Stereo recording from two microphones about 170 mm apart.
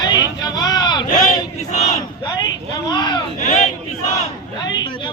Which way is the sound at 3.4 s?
45° left (ahead or behind).